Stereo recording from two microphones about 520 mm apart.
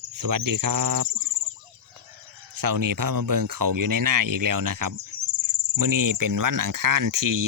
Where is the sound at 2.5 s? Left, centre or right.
Right.